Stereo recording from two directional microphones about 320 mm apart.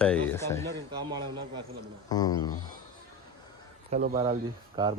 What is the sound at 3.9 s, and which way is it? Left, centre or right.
A man's voice, centre.